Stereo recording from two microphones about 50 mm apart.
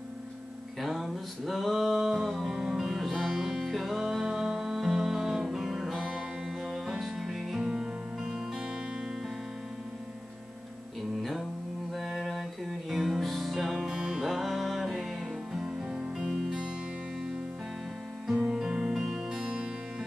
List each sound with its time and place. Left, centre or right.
0.7 s a sound: centre
2.2 s music: centre
11.9 s music: centre
13.8 s music: centre
14.2 s music: centre
18.3 s music: centre